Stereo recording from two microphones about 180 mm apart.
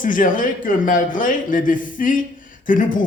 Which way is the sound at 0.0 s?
50° left (ahead or behind).